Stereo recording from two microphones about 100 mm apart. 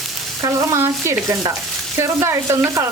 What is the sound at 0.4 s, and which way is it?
Stir, 30° right (ahead or behind).